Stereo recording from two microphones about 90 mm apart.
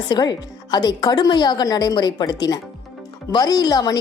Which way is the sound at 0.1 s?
50° left (ahead or behind).